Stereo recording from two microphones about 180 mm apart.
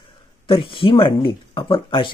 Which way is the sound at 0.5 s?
30° left (ahead or behind).